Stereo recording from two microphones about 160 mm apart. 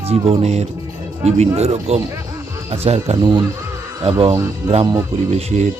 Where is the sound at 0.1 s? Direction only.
40° right (ahead or behind).